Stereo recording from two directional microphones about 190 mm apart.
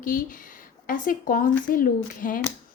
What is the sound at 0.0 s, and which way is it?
Speech, 45° left (ahead or behind).